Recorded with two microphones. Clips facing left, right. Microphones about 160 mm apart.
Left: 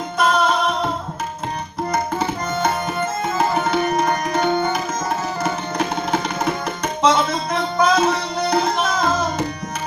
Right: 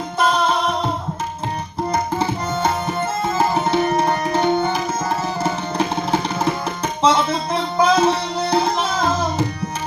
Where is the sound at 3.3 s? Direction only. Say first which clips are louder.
Right 1 dB; 30° right (ahead or behind).